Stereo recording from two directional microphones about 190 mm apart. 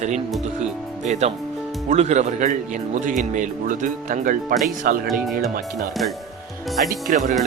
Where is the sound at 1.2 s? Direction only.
35° right (ahead or behind).